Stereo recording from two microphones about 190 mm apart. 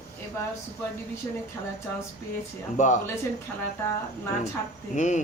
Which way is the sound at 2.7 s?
40° left (ahead or behind).